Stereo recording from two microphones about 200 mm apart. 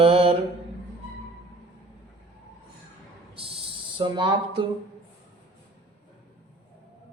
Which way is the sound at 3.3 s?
30° right (ahead or behind).